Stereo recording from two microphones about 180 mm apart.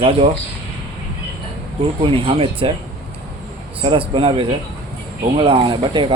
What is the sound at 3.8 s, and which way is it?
Speech, 30° right (ahead or behind).